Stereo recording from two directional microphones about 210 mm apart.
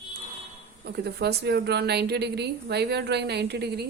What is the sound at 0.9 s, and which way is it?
A woman's voice, 50° right (ahead or behind).